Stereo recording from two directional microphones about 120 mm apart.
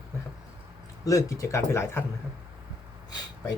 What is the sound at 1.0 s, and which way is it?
Speech, 25° left (ahead or behind).